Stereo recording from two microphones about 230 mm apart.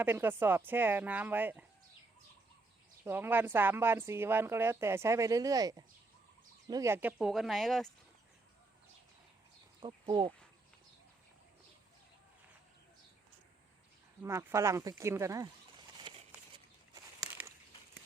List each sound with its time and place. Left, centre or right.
0.0 s speech: centre
3.0 s speech: centre
9.8 s speech: right
14.2 s speech: centre
16.0 s a sound: right